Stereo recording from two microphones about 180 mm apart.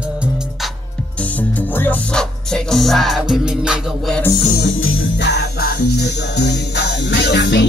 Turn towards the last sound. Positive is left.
turn(degrees=75)  # may be behind; listen again after turning